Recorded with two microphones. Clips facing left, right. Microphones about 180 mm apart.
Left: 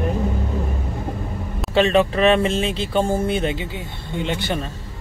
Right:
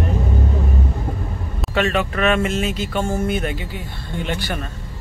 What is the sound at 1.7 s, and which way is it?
Speech, 30° left (ahead or behind).